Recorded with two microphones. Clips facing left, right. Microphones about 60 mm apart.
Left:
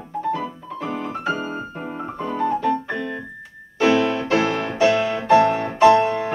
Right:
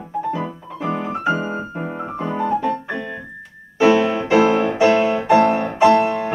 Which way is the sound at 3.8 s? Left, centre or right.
Centre.